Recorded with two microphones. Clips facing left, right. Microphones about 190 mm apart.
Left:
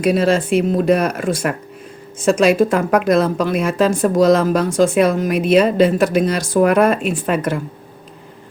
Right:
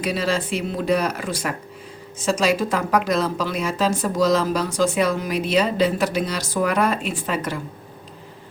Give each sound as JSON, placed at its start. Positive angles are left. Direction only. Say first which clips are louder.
{"t": 0.0, "sound": "a woman's voice", "louder": "left 8 dB", "side_deg": 50}